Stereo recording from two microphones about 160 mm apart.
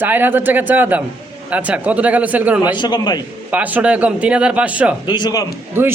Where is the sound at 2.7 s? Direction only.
30° left (ahead or behind).